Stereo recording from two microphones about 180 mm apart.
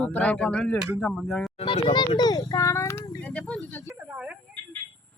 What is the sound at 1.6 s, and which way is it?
A child's voice, 30° left (ahead or behind).